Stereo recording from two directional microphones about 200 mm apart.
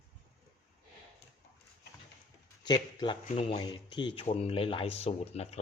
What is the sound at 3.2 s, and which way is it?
Speech, 30° left (ahead or behind).